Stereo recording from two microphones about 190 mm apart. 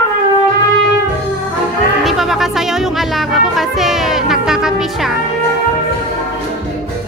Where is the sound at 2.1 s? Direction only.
Centre (ahead or behind).